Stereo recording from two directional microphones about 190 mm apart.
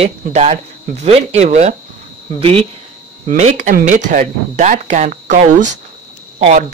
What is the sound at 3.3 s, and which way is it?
Speech, 40° right (ahead or behind).